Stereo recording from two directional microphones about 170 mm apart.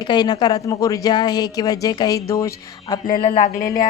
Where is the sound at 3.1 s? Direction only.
30° left (ahead or behind).